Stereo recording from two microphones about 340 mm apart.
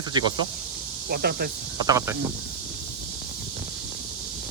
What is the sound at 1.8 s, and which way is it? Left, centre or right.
Speech, centre.